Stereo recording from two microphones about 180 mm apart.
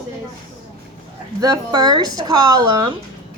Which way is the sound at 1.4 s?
20° right (ahead or behind).